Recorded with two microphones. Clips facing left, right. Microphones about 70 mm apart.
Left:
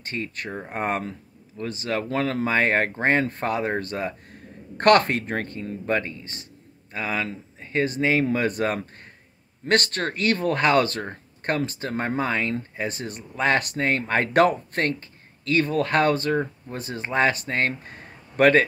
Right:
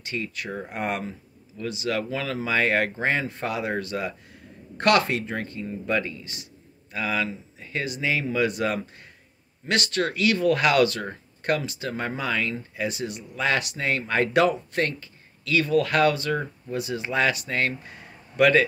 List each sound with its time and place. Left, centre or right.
0.0 s speech: left
2.0 s speech: left
5.9 s speech: left